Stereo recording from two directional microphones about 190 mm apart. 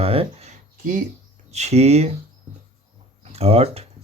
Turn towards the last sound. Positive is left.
turn(degrees=-30)  # may be behind; listen again after turning